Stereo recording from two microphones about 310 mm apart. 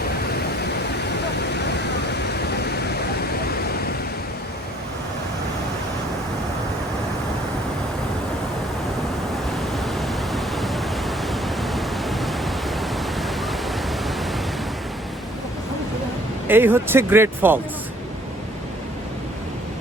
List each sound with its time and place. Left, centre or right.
1.5 s a sound: left
9.7 s pink noise: centre
16.5 s speech: centre